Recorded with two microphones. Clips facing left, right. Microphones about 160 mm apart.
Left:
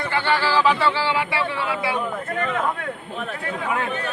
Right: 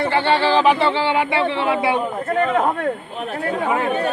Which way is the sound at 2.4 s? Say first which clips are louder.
Right 7 dB; 35° right (ahead or behind).